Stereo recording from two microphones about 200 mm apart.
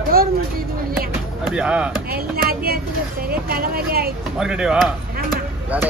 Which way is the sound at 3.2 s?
50° right (ahead or behind).